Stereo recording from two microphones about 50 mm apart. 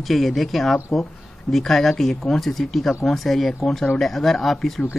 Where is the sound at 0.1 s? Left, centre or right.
Centre.